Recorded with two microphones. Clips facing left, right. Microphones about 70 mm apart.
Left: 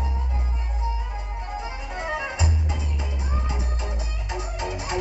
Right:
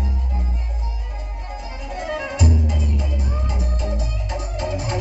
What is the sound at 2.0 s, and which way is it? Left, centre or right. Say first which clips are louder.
Music: right 5 dB; left.